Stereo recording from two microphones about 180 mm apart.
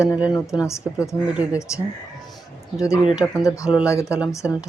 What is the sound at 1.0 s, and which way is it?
Speech, 5° right (ahead or behind).